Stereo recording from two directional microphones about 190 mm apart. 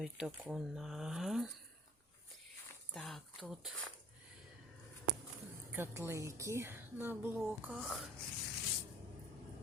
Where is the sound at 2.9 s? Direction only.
Centre (ahead or behind).